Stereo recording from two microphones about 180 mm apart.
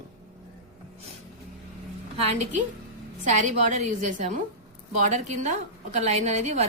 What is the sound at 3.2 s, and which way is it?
A woman's voice, 45° right (ahead or behind).